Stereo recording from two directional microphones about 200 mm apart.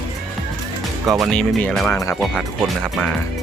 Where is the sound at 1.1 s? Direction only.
Centre (ahead or behind).